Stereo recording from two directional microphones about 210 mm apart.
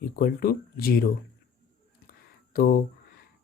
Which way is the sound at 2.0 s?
45° left (ahead or behind).